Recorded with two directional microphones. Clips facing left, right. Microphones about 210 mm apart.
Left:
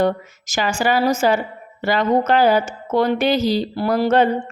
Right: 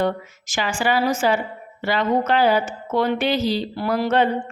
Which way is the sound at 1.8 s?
45° left (ahead or behind).